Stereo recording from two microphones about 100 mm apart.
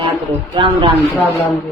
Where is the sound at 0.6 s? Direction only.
60° right (ahead or behind).